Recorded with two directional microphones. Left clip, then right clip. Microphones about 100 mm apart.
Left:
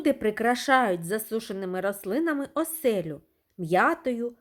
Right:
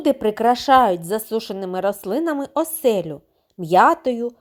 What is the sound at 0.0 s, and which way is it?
Speech, 30° right (ahead or behind).